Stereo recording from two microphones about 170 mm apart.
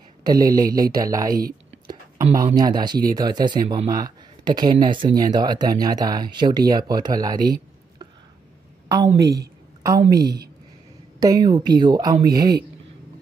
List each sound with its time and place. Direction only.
0.2 s speech: 20° right (ahead or behind)
1.4 s a sound: 20° right (ahead or behind)
2.5 s speech: 25° right (ahead or behind)
8.9 s speech: 20° right (ahead or behind)
9.3 s a sound: 20° right (ahead or behind)
10.1 s a woman's voice: 70° right (ahead or behind)
11.1 s speech: 20° right (ahead or behind)